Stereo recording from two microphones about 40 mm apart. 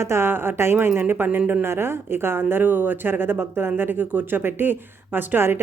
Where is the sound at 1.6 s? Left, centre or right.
Right.